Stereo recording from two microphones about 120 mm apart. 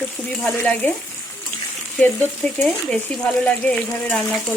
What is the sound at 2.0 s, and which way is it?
Stir, 15° left (ahead or behind).